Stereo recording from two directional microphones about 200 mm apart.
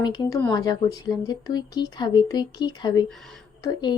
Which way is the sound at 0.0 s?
20° left (ahead or behind).